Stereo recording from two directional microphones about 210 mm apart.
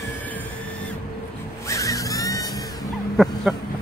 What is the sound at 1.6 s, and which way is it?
Music, 15° left (ahead or behind).